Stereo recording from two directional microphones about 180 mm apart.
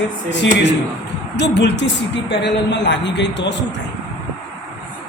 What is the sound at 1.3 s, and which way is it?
A woman's voice, 80° left.